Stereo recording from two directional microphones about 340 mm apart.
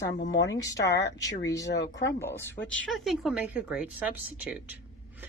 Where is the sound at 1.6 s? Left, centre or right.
Left.